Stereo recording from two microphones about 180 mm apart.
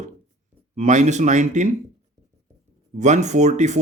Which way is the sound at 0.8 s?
40° right (ahead or behind).